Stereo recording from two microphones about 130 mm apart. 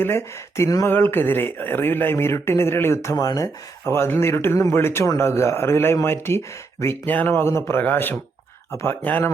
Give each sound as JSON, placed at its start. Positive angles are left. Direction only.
{"t": 0.0, "sound": "speech", "side_deg": 20}